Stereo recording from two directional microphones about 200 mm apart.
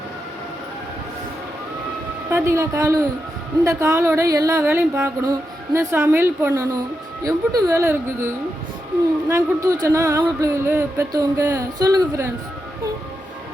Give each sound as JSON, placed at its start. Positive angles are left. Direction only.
{"t": 2.3, "sound": "speech", "side_deg": -15}
{"t": 9.3, "sound": "speech", "side_deg": -15}